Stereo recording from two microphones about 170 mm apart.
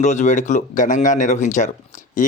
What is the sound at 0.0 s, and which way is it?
A man's voice, 45° left (ahead or behind).